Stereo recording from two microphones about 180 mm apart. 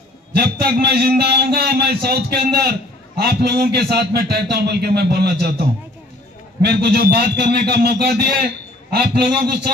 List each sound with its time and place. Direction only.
0.3 s a man's voice: 60° right (ahead or behind)